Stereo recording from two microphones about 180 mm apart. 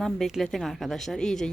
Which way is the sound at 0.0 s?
Centre (ahead or behind).